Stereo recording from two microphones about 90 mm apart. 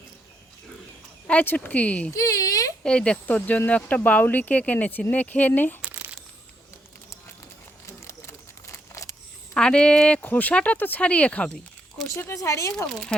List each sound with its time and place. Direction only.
1.3 s speech: 15° left (ahead or behind)
2.1 s speech: 40° left (ahead or behind)
2.8 s speech: 10° left (ahead or behind)
5.9 s a sound: 20° right (ahead or behind)
7.9 s a sound: 30° left (ahead or behind)
9.6 s speech: 10° left (ahead or behind)
12.1 s speech: 30° left (ahead or behind)
12.7 s speech: 5° left (ahead or behind)